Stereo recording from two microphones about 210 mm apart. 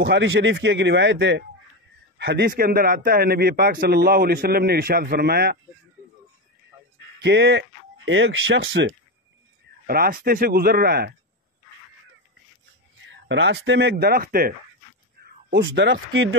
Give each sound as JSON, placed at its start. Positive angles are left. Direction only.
{"t": 0.0, "sound": "a man's voice", "side_deg": -55}
{"t": 7.2, "sound": "speech", "side_deg": -55}
{"t": 9.8, "sound": "a man's voice", "side_deg": -45}
{"t": 13.0, "sound": "speech", "side_deg": -60}
{"t": 15.5, "sound": "speech", "side_deg": -55}